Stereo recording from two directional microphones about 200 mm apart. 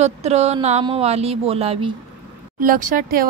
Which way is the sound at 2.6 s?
40° right (ahead or behind).